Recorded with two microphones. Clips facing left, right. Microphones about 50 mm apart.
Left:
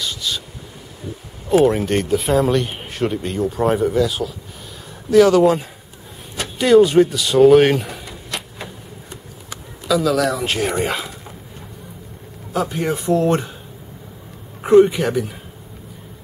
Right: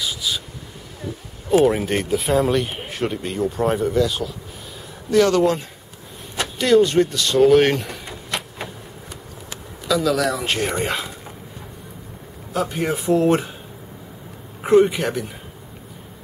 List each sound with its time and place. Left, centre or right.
0.0 s a sound: centre
1.6 s speech: centre
8.0 s a sound: right
9.8 s speech: centre
12.5 s speech: centre
14.6 s a man's voice: centre